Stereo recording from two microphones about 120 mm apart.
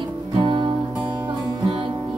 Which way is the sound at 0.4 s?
40° right (ahead or behind).